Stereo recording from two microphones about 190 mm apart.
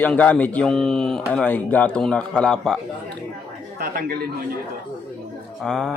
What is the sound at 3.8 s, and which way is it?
Speech, 50° right (ahead or behind).